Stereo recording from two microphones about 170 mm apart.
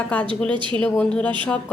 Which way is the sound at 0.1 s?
10° left (ahead or behind).